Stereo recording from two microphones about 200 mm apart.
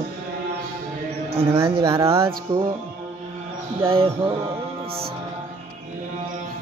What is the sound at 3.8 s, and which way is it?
Speech, 25° right (ahead or behind).